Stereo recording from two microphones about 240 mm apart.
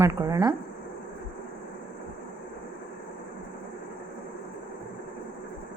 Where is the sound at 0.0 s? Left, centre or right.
Centre.